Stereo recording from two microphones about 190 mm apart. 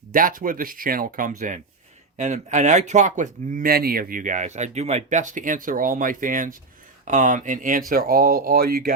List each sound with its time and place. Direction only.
0.1 s speech: 45° right (ahead or behind)